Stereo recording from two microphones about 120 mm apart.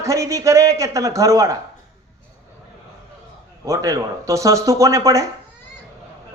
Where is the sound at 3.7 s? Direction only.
30° right (ahead or behind).